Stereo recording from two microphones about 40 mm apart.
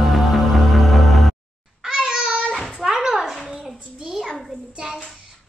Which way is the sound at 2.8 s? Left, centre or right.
Centre.